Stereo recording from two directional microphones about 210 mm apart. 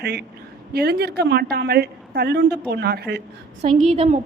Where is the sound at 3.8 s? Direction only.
30° right (ahead or behind).